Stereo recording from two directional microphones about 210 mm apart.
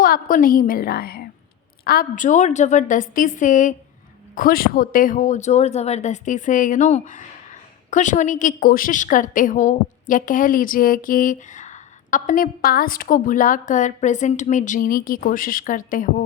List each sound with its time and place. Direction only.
0.0 s a woman's voice: 40° left (ahead or behind)